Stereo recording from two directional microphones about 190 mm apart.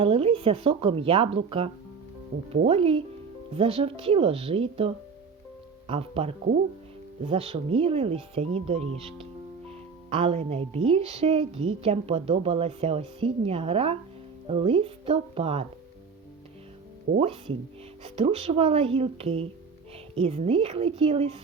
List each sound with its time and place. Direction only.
0.0 s speech: 30° right (ahead or behind)
2.3 s speech: 60° right (ahead or behind)
2.6 s speech: 30° right (ahead or behind)
5.9 s speech: 30° right (ahead or behind)
17.2 s speech: 30° right (ahead or behind)